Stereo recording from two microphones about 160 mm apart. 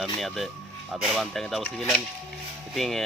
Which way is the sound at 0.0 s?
Centre (ahead or behind).